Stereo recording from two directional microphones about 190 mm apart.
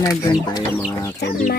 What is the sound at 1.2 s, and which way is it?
Speech, 55° left (ahead or behind).